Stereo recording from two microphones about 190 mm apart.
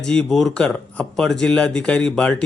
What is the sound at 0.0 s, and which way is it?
A man's voice, 5° left (ahead or behind).